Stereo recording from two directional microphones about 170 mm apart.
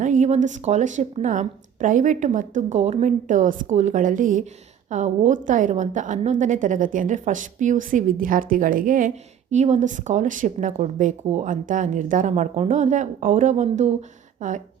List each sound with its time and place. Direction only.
0.0 s a woman's voice: 45° right (ahead or behind)